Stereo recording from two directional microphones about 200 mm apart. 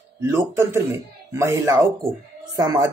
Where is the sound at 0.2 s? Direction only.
15° right (ahead or behind).